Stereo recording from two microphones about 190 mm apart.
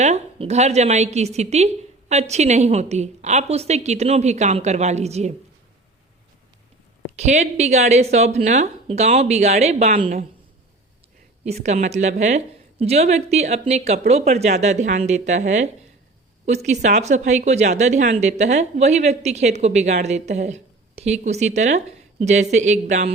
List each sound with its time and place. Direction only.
0.0 s a woman's voice: 35° right (ahead or behind)
7.2 s a woman's voice: 35° right (ahead or behind)
11.6 s a woman's voice: 35° right (ahead or behind)